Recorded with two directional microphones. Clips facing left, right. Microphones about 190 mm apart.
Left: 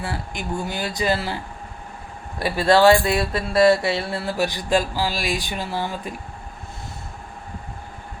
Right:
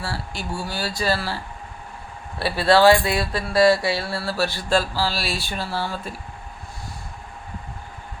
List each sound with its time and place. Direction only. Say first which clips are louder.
0.0 s speech: left 1 dB; 20° left (ahead or behind)
2.4 s mantra: even; 15° left (ahead or behind)